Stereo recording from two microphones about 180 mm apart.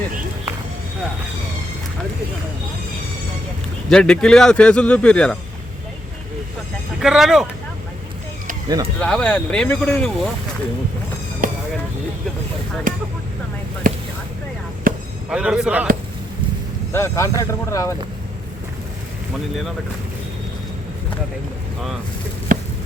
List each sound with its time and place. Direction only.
3.8 s a man's voice: 5° left (ahead or behind)
7.0 s a man's voice: 5° right (ahead or behind)
8.6 s speech: 20° right (ahead or behind)
9.0 s a man's voice: 5° left (ahead or behind)
11.4 s vehicle: 50° right (ahead or behind)
12.9 s vehicle: 45° right (ahead or behind)
15.3 s a man's voice: 5° right (ahead or behind)
16.9 s speech: 15° left (ahead or behind)
22.5 s a sound: 45° right (ahead or behind)